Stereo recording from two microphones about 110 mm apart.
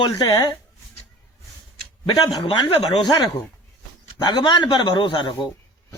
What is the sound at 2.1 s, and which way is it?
A man's voice, 40° left (ahead or behind).